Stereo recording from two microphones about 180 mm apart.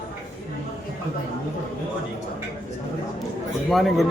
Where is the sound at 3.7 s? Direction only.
Centre (ahead or behind).